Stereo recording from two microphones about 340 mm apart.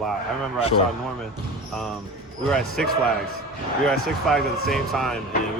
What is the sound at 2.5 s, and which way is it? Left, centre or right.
Speech, centre.